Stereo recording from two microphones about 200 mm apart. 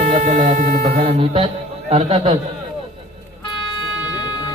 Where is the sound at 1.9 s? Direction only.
30° right (ahead or behind).